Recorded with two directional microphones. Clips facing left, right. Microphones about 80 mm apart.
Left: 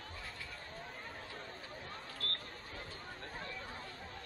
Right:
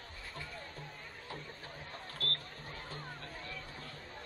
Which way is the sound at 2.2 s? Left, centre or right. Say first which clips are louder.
Right 5 dB; right.